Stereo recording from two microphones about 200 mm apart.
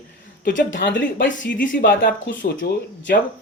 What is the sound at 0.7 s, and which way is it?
A man's voice, 65° left (ahead or behind).